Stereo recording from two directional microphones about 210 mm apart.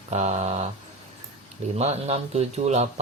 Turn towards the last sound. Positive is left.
turn(degrees=-30)  # may be behind; listen again after turning